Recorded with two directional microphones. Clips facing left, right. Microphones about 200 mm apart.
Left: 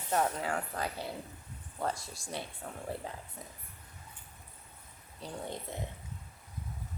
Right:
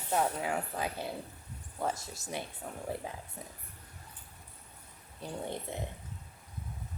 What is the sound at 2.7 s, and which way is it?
Speech, 10° right (ahead or behind).